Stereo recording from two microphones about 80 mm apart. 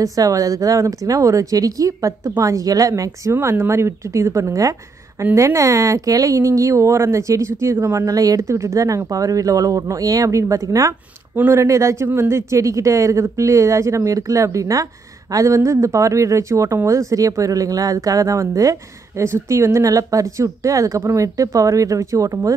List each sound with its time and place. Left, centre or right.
0.0 s speech: right
11.3 s speech: right
19.2 s speech: right